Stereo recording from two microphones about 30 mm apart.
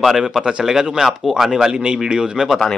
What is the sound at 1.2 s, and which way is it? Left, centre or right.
Speech, centre.